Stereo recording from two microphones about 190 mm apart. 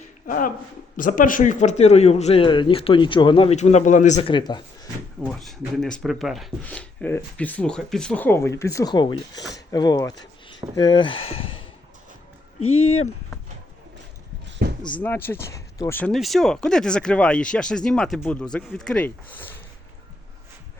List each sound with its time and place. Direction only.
0.3 s speech: 45° left (ahead or behind)
4.3 s speech: 25° left (ahead or behind)
5.2 s speech: centre (ahead or behind); by 11.7 s 30° left (ahead or behind)
12.6 s speech: 90° left
14.6 s a sound: 60° right (ahead or behind)
15.0 s speech: 10° left (ahead or behind)